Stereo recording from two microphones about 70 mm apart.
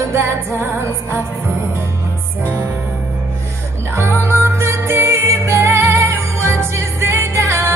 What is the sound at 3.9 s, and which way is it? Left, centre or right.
Music, right.